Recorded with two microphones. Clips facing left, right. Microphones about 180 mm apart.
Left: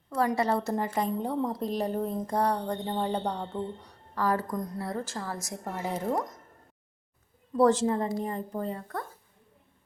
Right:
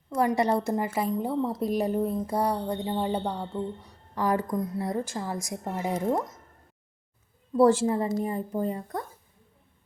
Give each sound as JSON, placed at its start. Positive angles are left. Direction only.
{"t": 0.3, "sound": "speech", "side_deg": -15}
{"t": 4.1, "sound": "speech", "side_deg": -15}
{"t": 4.5, "sound": "speech", "side_deg": -5}
{"t": 4.8, "sound": "speech", "side_deg": -15}
{"t": 7.5, "sound": "speech", "side_deg": -10}